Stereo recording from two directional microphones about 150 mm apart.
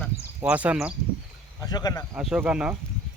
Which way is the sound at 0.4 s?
10° right (ahead or behind).